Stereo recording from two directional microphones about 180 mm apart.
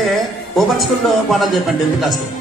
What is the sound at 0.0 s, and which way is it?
Music, centre (ahead or behind).